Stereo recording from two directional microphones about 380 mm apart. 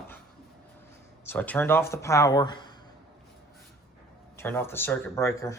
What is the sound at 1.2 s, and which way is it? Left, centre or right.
Speech, centre.